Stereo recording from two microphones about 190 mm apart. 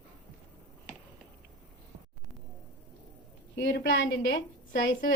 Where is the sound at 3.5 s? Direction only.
60° left (ahead or behind).